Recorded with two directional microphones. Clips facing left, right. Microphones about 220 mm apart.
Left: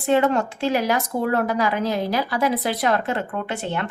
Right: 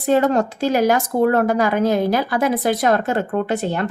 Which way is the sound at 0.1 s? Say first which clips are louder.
Right 3 dB; 40° right (ahead or behind).